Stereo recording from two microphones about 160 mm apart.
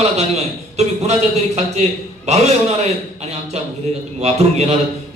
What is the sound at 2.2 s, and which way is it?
Speech, 45° right (ahead or behind).